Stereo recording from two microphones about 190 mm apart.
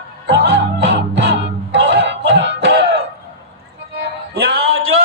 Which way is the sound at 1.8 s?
70° right (ahead or behind).